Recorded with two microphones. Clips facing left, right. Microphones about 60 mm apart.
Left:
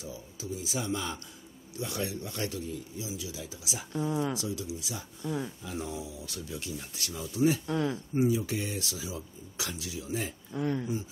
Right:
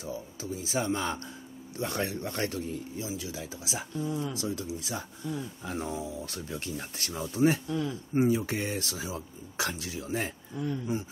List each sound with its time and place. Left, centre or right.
0.0 s speech: right
3.9 s speech: left
4.4 s speech: right
7.6 s speech: left
8.1 s speech: right
10.6 s speech: left